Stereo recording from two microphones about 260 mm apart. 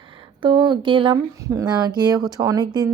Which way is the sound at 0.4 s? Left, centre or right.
Centre.